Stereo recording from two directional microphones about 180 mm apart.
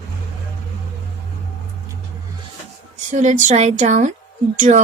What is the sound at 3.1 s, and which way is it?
Speech, 40° right (ahead or behind).